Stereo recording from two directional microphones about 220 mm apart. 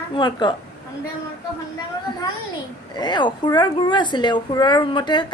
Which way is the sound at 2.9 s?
20° left (ahead or behind).